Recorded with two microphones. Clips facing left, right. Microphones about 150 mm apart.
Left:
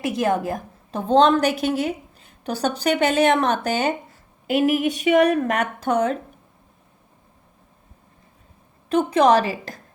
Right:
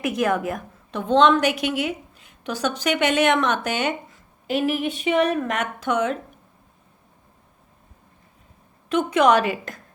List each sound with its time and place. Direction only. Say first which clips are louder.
0.2 s a woman's voice: left 1 dB; 30° left (ahead or behind)
8.9 s a woman's voice: left 1 dB; 35° left (ahead or behind)